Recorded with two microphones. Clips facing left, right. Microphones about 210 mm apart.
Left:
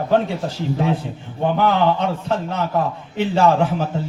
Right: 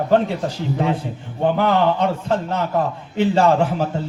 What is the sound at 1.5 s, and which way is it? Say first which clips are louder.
A man's voice: left 1 dB; 55° right (ahead or behind).